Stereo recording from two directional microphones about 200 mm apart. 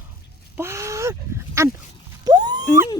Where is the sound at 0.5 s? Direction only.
15° right (ahead or behind).